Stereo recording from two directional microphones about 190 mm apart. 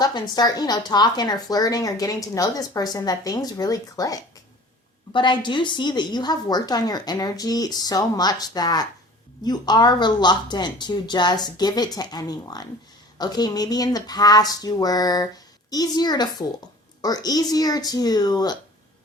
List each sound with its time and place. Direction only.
0.0 s a woman's voice: 20° left (ahead or behind)